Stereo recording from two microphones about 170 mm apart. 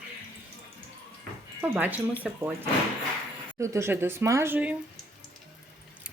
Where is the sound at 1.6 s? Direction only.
10° right (ahead or behind).